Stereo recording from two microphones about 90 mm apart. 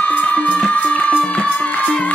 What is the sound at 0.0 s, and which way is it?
Music, 15° left (ahead or behind).